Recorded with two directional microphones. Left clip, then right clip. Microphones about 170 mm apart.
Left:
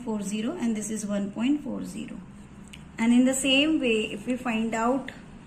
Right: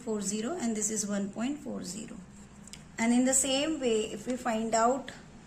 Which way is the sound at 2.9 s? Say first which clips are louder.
Left 4 dB; 30° right (ahead or behind).